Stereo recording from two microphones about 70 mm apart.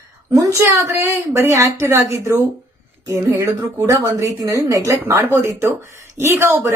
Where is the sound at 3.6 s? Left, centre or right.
Right.